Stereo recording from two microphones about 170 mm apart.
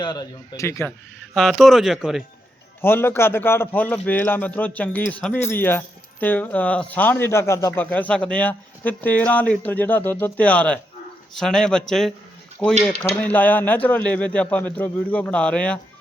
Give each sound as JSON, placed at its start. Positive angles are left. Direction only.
{"t": 0.0, "sound": "a man's voice", "side_deg": 25}
{"t": 1.3, "sound": "speech", "side_deg": 0}
{"t": 2.8, "sound": "a man's voice", "side_deg": 15}